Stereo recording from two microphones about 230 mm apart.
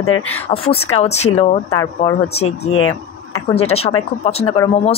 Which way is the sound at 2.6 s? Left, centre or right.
Left.